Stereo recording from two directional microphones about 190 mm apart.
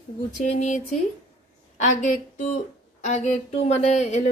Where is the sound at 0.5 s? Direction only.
40° left (ahead or behind).